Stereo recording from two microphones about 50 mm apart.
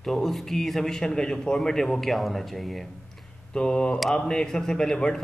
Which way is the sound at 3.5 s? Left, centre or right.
Centre.